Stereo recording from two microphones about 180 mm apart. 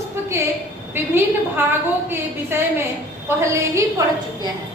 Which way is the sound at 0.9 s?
10° right (ahead or behind).